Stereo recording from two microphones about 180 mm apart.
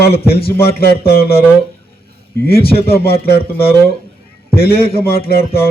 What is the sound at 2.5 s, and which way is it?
A man's voice, 60° left (ahead or behind).